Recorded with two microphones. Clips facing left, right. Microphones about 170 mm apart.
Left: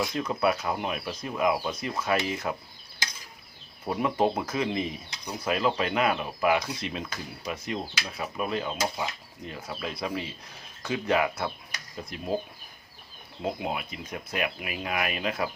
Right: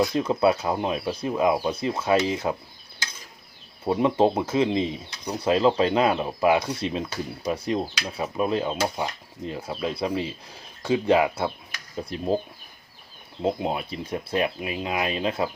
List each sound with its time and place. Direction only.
0.1 s speech: 30° right (ahead or behind)
3.8 s speech: 25° right (ahead or behind)
13.4 s speech: 30° right (ahead or behind)